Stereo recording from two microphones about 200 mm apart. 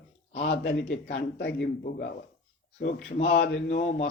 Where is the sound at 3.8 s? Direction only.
40° left (ahead or behind).